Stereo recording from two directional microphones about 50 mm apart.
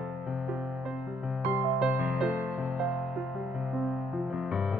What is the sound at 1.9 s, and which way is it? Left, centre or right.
Music, right.